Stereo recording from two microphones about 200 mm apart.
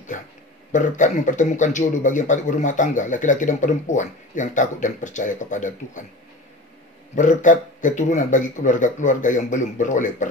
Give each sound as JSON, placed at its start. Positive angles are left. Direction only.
{"t": 0.1, "sound": "a sound", "side_deg": 40}
{"t": 0.7, "sound": "a man's voice", "side_deg": 40}
{"t": 7.2, "sound": "a man's voice", "side_deg": 40}